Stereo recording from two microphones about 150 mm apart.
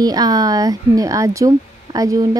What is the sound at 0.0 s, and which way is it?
Speech, 25° right (ahead or behind).